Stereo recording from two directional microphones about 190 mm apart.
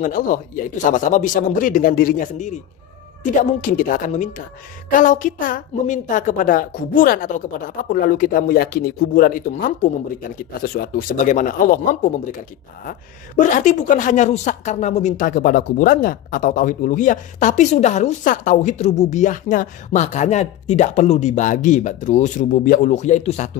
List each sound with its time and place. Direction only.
0.0 s a woman's voice: 45° left (ahead or behind)
13.4 s speech: 40° left (ahead or behind)